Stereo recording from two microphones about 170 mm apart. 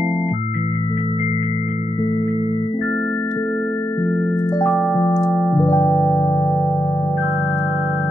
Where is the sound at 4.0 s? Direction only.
20° left (ahead or behind).